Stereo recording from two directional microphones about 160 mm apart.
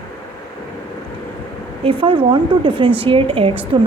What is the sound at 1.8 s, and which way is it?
A woman's voice, 35° right (ahead or behind).